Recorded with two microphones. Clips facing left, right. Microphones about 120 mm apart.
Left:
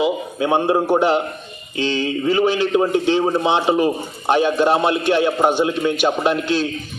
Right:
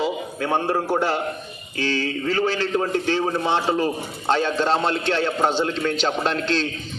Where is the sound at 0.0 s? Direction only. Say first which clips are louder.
Left 5 dB; 15° left (ahead or behind).